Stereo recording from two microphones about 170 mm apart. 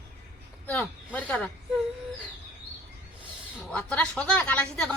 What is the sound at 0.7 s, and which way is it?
Speech, 10° left (ahead or behind).